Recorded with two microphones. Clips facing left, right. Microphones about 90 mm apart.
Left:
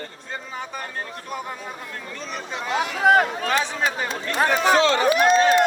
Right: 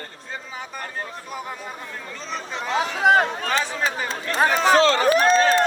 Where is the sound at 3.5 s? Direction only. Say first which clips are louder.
Left 1 dB; centre (ahead or behind).